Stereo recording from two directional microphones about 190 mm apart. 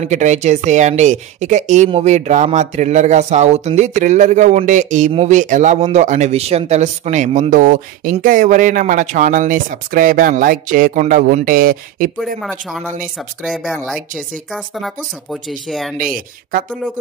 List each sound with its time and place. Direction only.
0.0 s speech: 40° right (ahead or behind)
12.4 s speech: centre (ahead or behind)
16.0 s speech: 45° right (ahead or behind)